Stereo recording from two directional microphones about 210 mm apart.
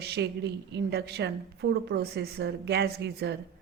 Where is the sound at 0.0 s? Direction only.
55° right (ahead or behind).